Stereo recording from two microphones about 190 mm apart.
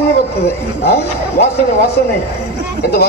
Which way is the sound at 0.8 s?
55° left (ahead or behind).